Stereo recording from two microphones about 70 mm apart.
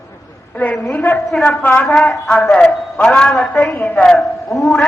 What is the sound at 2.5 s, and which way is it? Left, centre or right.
Speech, centre.